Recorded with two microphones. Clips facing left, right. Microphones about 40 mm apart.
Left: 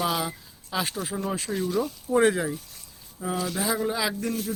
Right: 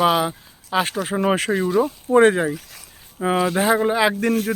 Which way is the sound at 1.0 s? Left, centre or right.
Right.